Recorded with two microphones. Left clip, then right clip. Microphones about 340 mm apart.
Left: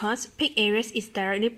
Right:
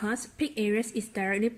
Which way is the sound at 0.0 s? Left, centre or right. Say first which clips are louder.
Left 5 dB; centre.